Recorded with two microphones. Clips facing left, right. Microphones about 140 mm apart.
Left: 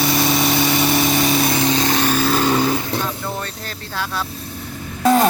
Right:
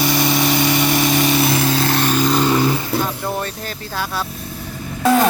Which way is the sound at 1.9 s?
10° left (ahead or behind).